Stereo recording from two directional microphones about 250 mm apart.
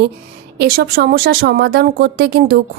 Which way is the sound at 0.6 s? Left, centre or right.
Right.